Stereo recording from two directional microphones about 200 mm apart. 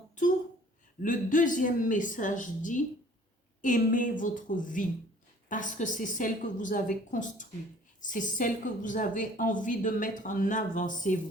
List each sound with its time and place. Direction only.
1.0 s a woman's voice: 40° left (ahead or behind)